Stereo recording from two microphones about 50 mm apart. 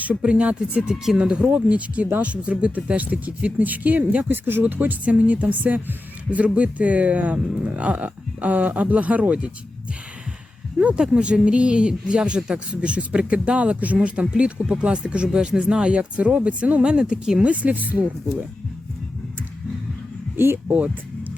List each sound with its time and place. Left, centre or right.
0.0 s speech: right
10.8 s speech: right
20.3 s speech: right
20.7 s speech: right